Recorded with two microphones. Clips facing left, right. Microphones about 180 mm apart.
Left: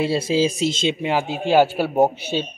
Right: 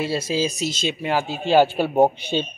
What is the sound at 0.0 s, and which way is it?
Speech, 25° left (ahead or behind).